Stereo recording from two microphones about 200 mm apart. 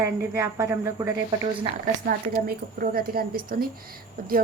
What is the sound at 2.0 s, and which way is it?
A woman's voice, 50° right (ahead or behind).